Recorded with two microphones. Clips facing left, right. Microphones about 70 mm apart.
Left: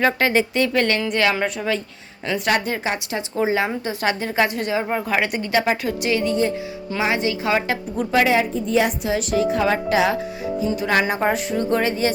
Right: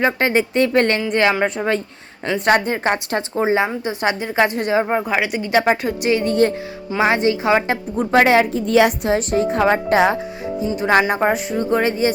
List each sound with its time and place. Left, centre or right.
0.0 s a woman's voice: right
2.8 s a woman's voice: right
3.3 s a woman's voice: right
4.9 s a woman's voice: centre
5.5 s a woman's voice: right
8.2 s a woman's voice: right
9.0 s speech: right
10.5 s speech: centre
10.8 s a woman's voice: right
11.2 s a woman's voice: centre
11.8 s a woman's voice: right